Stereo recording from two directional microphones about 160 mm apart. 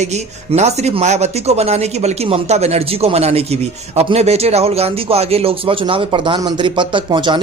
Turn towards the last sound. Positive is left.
turn(degrees=-30)  # may be behind; listen again after turning